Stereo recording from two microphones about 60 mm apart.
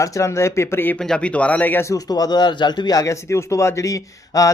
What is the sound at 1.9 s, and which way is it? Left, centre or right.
Speech, left.